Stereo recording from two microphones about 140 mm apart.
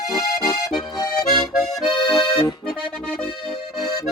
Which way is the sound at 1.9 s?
40° left (ahead or behind).